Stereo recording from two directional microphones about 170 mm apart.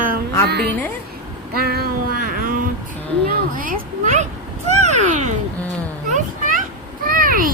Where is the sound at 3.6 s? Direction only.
50° right (ahead or behind).